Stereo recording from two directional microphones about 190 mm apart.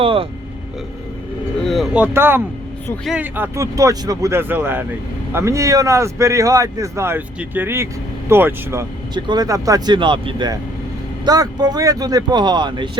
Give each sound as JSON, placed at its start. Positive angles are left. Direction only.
{"t": 0.0, "sound": "vehicle", "side_deg": -30}
{"t": 1.6, "sound": "speech", "side_deg": 0}
{"t": 2.8, "sound": "speech", "side_deg": 0}
{"t": 3.2, "sound": "speech", "side_deg": -10}